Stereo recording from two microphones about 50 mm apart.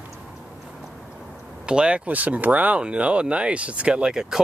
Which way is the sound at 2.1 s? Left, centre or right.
Right.